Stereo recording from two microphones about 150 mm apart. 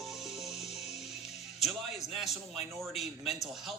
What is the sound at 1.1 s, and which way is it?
Music, 45° left (ahead or behind).